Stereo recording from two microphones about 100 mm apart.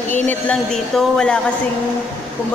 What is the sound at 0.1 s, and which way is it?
Speech, 20° left (ahead or behind).